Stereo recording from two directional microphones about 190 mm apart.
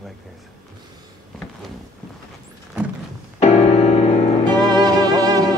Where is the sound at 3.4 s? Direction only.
35° left (ahead or behind).